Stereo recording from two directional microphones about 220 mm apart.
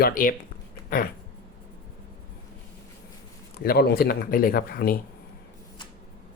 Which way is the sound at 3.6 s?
45° left (ahead or behind).